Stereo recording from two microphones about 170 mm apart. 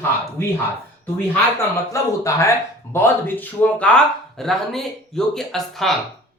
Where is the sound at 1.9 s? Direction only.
20° left (ahead or behind); by 6.0 s centre (ahead or behind).